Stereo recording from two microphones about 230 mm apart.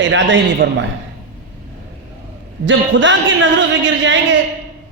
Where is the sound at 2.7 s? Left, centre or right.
Right.